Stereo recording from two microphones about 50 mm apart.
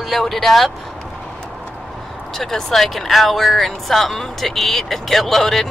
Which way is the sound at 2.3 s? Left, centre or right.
Centre.